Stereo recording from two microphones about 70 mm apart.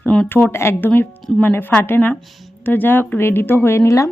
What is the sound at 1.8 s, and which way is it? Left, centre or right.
Speech, left.